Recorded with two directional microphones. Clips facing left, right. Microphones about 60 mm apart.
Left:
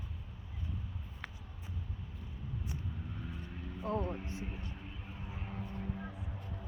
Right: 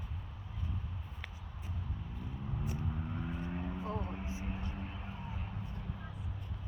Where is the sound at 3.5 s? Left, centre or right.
Right.